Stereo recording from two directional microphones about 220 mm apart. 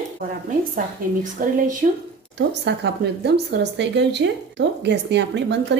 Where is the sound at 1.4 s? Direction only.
40° right (ahead or behind).